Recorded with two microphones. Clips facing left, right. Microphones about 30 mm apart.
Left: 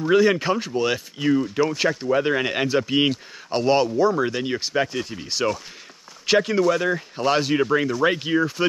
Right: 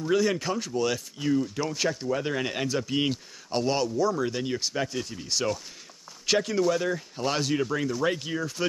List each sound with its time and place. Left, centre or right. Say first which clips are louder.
0.0 s speech: left 7 dB; left